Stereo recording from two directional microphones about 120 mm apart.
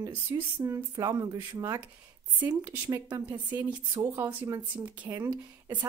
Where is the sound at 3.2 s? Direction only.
15° right (ahead or behind).